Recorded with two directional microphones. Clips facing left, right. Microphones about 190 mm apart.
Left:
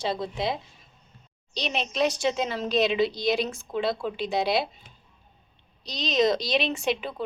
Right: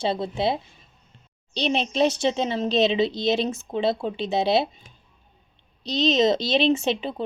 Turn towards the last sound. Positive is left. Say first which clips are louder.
# right 6 dB
turn(degrees=-25)  # may be behind; listen again after turning